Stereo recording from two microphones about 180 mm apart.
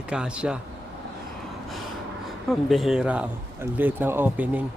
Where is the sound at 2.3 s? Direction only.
Centre (ahead or behind).